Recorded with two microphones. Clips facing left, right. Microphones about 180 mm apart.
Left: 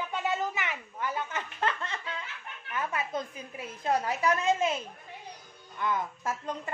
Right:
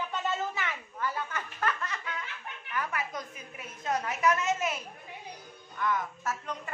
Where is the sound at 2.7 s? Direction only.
25° left (ahead or behind).